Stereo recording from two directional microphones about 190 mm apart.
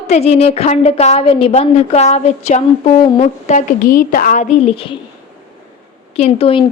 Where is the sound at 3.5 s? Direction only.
45° left (ahead or behind).